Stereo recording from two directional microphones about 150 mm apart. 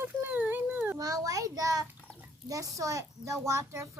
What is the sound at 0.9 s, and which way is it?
Speech, 25° right (ahead or behind).